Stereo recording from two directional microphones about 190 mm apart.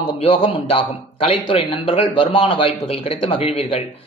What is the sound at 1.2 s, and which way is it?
A man's voice, 30° left (ahead or behind).